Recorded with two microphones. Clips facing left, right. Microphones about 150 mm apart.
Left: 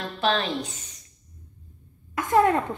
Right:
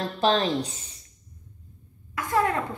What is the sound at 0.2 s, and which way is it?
Speech, 35° right (ahead or behind).